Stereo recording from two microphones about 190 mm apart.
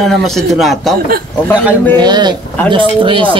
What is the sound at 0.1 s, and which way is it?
Speech, centre (ahead or behind).